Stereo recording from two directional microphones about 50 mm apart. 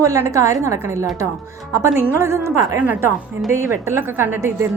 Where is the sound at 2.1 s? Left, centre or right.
Right.